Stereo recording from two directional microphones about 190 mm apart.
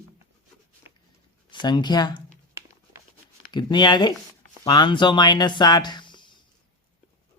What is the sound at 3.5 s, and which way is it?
Speech, 25° left (ahead or behind).